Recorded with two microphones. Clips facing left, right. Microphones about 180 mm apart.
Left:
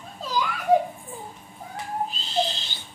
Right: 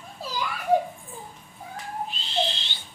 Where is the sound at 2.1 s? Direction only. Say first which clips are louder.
Right 1 dB; 40° left (ahead or behind).